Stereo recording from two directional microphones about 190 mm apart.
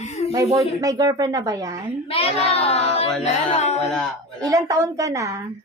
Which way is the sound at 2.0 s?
30° left (ahead or behind).